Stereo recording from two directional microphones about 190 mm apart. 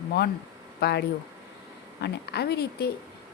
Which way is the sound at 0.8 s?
60° left (ahead or behind).